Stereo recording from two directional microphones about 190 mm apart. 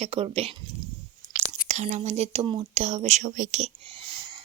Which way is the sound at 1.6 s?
40° right (ahead or behind).